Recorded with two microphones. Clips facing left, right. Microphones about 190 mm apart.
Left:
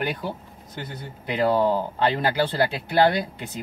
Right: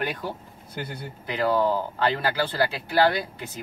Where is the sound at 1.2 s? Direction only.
20° left (ahead or behind).